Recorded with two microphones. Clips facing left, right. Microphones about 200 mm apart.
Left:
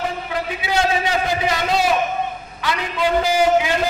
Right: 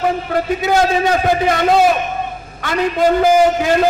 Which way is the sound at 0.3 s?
50° right (ahead or behind).